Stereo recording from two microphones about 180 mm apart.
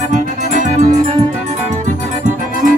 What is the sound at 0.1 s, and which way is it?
Music, 45° right (ahead or behind).